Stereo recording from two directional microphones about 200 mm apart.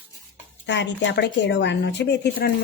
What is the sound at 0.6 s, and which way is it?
Speech, 60° left (ahead or behind).